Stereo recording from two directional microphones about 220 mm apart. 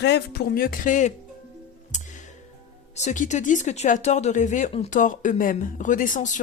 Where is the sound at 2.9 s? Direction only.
35° left (ahead or behind).